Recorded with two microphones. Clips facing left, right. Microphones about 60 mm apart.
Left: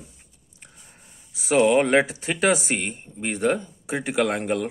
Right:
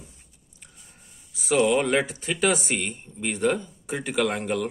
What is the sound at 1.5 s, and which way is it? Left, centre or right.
Speech, left.